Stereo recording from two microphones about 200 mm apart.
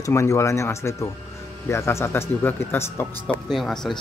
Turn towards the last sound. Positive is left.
turn(degrees=0)  # may be behind; listen again after turning